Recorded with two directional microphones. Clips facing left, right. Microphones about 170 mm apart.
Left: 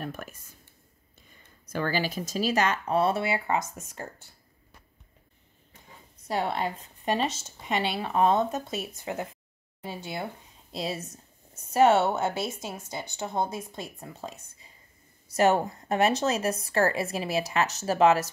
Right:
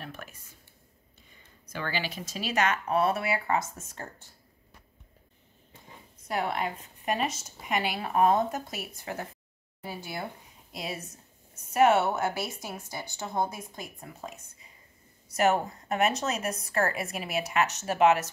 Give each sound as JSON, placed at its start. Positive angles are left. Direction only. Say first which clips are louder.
{"t": 0.0, "sound": "speech", "louder": "left 6 dB", "side_deg": 45}
{"t": 1.7, "sound": "speech", "louder": "left 5 dB", "side_deg": 40}
{"t": 6.2, "sound": "a woman's voice", "louder": "left 2 dB", "side_deg": 30}